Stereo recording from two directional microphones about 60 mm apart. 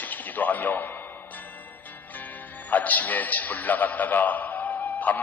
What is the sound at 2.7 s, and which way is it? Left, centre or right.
A man's voice, left.